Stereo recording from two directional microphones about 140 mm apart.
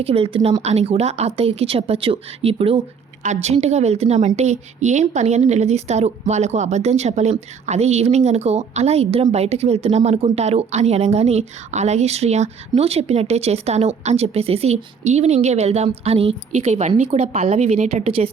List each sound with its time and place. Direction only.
0.0 s a woman's voice: 45° right (ahead or behind)